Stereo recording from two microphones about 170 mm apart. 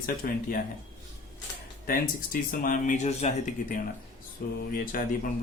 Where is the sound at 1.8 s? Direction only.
55° left (ahead or behind).